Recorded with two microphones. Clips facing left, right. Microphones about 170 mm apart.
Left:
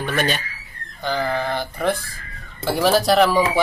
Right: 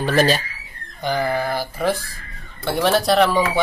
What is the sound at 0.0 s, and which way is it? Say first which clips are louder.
Speech: right 5 dB; 35° right (ahead or behind).